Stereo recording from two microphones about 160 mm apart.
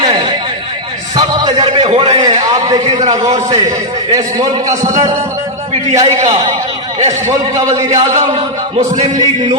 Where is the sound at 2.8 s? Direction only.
45° right (ahead or behind).